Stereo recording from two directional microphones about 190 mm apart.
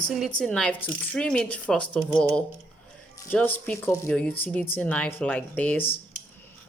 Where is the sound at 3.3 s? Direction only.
10° left (ahead or behind).